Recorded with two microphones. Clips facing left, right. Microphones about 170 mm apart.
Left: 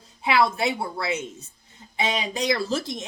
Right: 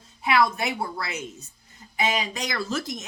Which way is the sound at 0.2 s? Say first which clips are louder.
Left 1 dB; 30° left (ahead or behind).